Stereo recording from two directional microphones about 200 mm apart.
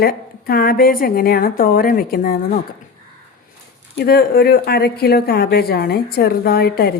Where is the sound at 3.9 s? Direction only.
50° left (ahead or behind).